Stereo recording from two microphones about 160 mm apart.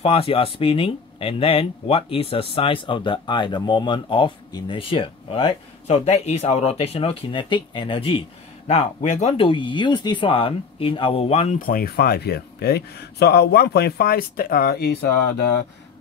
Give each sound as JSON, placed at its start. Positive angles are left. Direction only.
{"t": 0.0, "sound": "speech", "side_deg": 35}
{"t": 8.6, "sound": "speech", "side_deg": 45}
{"t": 11.6, "sound": "speech", "side_deg": 65}